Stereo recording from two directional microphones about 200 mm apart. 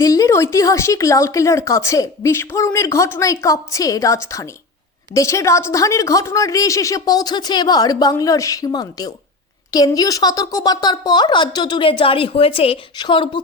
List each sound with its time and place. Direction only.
0.0 s a woman's voice: 15° left (ahead or behind)